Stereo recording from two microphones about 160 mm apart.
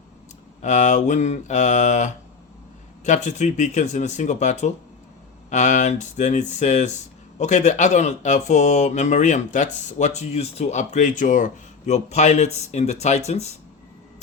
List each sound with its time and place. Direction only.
0.6 s speech: 50° left (ahead or behind)